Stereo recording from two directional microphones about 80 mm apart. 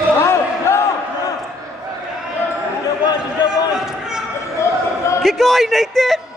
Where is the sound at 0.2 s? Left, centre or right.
Left.